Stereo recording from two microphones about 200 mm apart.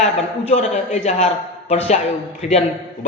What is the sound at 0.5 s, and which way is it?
A woman's voice, 35° left (ahead or behind).